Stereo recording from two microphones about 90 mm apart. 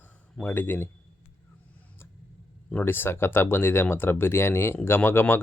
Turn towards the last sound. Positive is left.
turn(degrees=25)  # may be behind; listen again after turning